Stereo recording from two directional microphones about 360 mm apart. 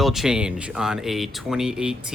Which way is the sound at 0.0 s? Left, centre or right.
Centre.